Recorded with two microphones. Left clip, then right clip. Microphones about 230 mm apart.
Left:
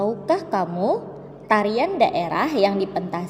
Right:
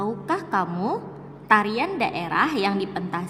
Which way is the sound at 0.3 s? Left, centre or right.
Centre.